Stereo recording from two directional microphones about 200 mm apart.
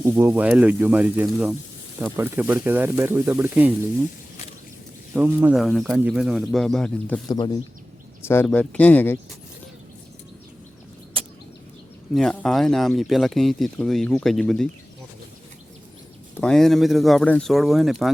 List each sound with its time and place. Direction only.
0.0 s speech: 10° right (ahead or behind)
5.1 s speech: 5° right (ahead or behind)
7.3 s speech: 20° left (ahead or behind)
8.3 s speech: 10° left (ahead or behind)
12.1 s speech: 5° left (ahead or behind)
16.4 s speech: centre (ahead or behind)